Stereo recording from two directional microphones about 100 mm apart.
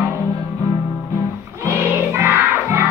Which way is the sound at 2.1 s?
25° right (ahead or behind).